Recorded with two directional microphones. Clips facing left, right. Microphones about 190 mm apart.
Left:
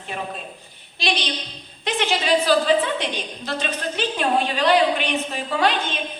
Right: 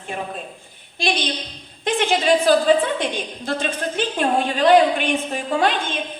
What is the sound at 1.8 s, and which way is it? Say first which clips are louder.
A woman's voice: right 4 dB; 50° right (ahead or behind).